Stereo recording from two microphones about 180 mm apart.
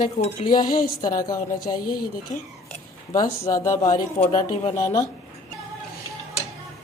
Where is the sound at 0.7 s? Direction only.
55° left (ahead or behind).